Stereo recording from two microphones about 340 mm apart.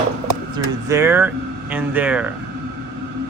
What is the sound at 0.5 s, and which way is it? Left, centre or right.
Speech, centre.